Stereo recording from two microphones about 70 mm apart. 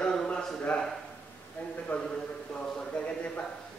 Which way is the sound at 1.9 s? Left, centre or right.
Centre.